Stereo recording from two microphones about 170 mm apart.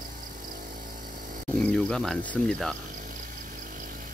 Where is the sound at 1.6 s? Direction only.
5° left (ahead or behind).